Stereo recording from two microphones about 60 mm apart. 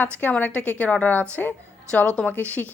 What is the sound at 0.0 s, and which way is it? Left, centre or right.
A woman's voice, left.